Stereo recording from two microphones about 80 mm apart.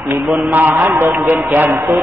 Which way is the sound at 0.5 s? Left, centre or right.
Right.